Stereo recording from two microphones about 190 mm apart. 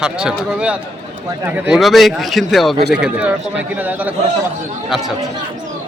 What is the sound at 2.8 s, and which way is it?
Speech, 60° right (ahead or behind).